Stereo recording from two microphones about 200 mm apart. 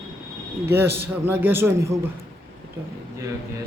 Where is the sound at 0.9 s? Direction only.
10° right (ahead or behind).